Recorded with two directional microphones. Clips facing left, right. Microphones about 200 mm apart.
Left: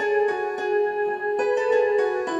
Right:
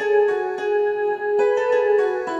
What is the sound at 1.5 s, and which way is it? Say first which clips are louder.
Music: left 1 dB; 20° left (ahead or behind).